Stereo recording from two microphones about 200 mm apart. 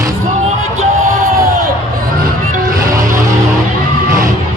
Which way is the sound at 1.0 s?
15° right (ahead or behind).